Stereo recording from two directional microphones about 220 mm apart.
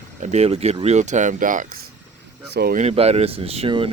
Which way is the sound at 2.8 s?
30° right (ahead or behind).